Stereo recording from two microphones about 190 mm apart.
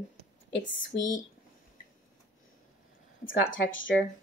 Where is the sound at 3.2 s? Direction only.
45° left (ahead or behind).